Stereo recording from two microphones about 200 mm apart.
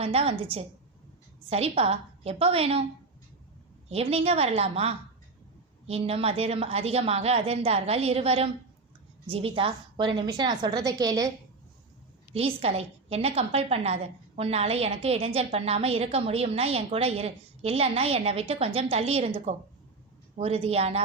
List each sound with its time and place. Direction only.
0.0 s a woman's voice: 30° right (ahead or behind)
1.5 s a woman's voice: 30° right (ahead or behind)
3.8 s a woman's voice: 30° right (ahead or behind)
12.3 s a woman's voice: 30° right (ahead or behind)